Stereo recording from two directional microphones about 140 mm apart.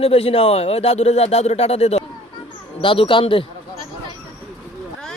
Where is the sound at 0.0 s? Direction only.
45° left (ahead or behind).